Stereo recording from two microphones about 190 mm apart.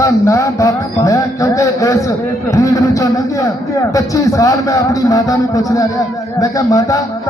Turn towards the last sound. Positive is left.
turn(degrees=15)  # may be behind; listen again after turning